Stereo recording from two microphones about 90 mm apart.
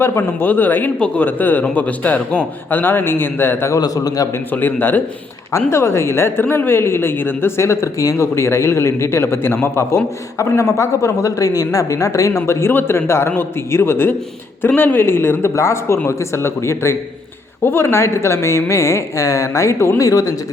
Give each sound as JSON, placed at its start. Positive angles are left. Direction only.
{"t": 0.0, "sound": "speech", "side_deg": 25}
{"t": 0.9, "sound": "speech", "side_deg": 10}
{"t": 1.2, "sound": "speech", "side_deg": 20}
{"t": 3.8, "sound": "a man's voice", "side_deg": 45}
{"t": 4.5, "sound": "speech", "side_deg": 20}
{"t": 5.5, "sound": "a woman's voice", "side_deg": 35}